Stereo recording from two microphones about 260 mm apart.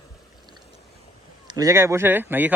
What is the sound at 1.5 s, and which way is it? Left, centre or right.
A man's voice, centre.